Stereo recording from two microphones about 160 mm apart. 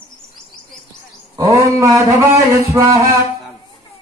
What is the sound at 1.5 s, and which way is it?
A man's voice, 20° right (ahead or behind).